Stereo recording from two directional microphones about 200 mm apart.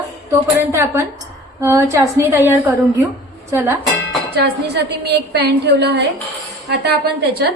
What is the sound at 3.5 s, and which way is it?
Music, 10° right (ahead or behind).